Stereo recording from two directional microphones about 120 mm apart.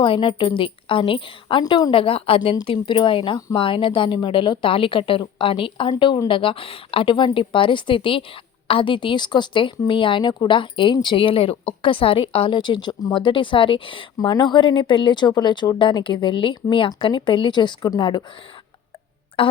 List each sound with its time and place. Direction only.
0.0 s speech: 45° left (ahead or behind)
5.9 s a woman's voice: 35° left (ahead or behind)
19.4 s speech: 45° left (ahead or behind)